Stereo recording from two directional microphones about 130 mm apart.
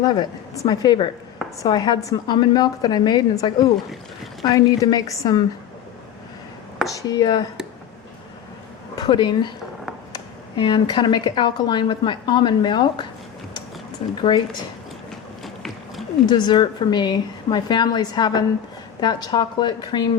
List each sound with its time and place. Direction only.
0.0 s a woman's voice: 30° left (ahead or behind)
6.8 s speech: 30° left (ahead or behind)
9.0 s a woman's voice: 35° left (ahead or behind)
10.6 s speech: 40° left (ahead or behind)
14.2 s speech: 35° left (ahead or behind)
16.2 s speech: 35° left (ahead or behind)